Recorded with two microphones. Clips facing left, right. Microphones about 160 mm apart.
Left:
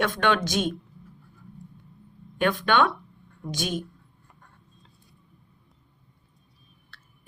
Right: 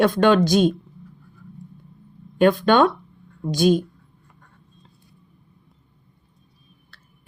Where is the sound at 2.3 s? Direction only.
40° right (ahead or behind).